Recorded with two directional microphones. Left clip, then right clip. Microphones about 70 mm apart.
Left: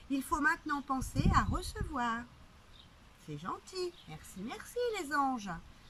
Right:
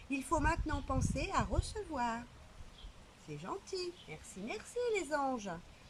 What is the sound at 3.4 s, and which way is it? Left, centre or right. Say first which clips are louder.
Speech: left 2 dB; right.